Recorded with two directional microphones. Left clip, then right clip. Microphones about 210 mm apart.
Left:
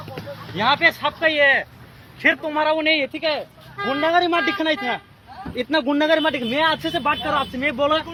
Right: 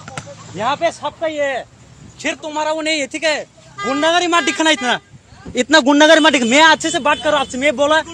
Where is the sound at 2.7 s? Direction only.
30° right (ahead or behind).